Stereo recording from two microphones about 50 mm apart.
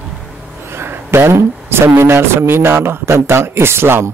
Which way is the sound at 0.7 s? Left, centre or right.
Right.